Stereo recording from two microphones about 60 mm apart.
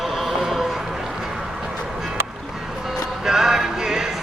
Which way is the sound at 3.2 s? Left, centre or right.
Centre.